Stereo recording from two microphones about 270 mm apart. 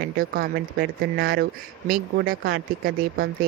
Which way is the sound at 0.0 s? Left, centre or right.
Right.